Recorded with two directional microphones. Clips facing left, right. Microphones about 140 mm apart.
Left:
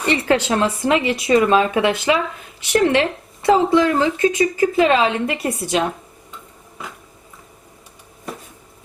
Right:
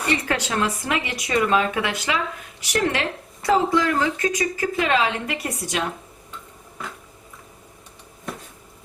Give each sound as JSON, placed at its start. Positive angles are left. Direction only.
{"t": 0.0, "sound": "speech", "side_deg": 25}